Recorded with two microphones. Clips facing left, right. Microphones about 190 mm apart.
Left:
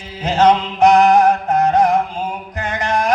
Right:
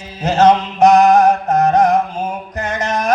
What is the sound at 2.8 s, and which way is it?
Music, 20° right (ahead or behind).